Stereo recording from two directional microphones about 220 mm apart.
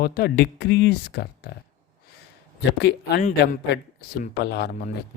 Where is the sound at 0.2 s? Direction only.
45° left (ahead or behind).